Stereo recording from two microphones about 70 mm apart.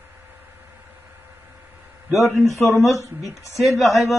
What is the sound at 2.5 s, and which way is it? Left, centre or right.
Speech, left.